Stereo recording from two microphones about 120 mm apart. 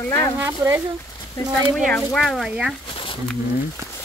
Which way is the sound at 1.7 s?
Centre (ahead or behind).